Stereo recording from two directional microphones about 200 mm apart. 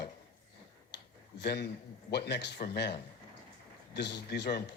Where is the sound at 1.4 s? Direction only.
55° left (ahead or behind).